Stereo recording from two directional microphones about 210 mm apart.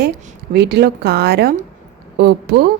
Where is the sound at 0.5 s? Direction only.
50° right (ahead or behind).